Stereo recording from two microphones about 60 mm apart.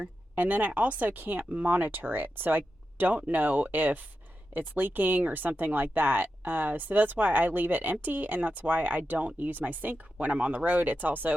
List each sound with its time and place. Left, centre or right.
0.0 s speech: right